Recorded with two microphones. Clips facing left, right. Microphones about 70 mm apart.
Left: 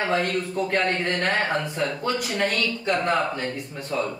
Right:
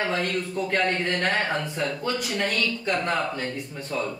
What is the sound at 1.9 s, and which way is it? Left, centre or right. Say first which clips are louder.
Speech: left 1 dB; centre.